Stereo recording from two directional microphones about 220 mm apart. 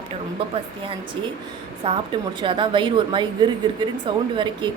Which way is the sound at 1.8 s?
25° right (ahead or behind).